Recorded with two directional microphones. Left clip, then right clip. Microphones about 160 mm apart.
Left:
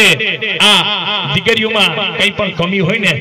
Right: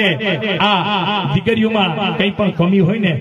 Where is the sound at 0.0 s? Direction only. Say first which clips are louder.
Left 6 dB; 45° right (ahead or behind).